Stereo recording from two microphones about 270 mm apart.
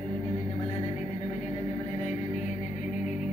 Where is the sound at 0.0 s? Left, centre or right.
Left.